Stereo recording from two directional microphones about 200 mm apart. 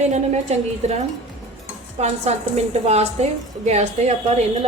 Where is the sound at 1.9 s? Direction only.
35° right (ahead or behind).